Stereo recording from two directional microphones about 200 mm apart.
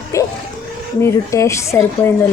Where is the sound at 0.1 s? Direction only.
15° left (ahead or behind).